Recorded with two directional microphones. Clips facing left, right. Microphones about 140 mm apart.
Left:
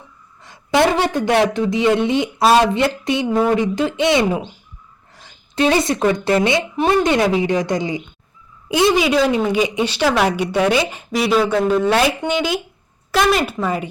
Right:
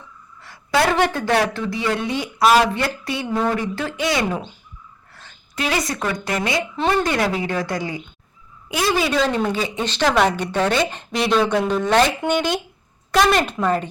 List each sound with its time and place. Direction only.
0.4 s speech: 20° left (ahead or behind)
5.5 s a woman's voice: 25° left (ahead or behind); by 13.8 s 5° left (ahead or behind)